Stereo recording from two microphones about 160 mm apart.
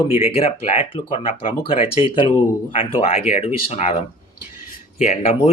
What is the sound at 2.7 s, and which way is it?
Speech, 35° left (ahead or behind).